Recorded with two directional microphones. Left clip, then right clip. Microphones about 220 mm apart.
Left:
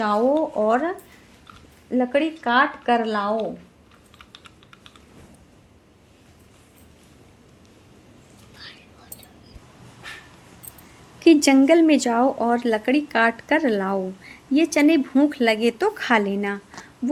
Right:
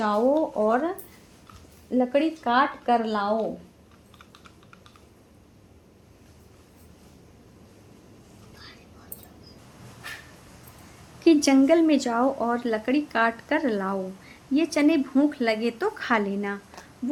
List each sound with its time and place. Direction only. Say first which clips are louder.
0.5 s speech: left 3 dB; 25° left (ahead or behind)
11.2 s speech: left 4 dB; 30° left (ahead or behind)